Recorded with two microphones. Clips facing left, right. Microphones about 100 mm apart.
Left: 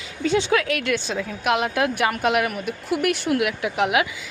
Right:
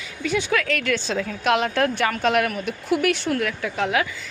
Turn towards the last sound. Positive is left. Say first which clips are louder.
# left 2 dB
turn(degrees=15)  # may be behind; listen again after turning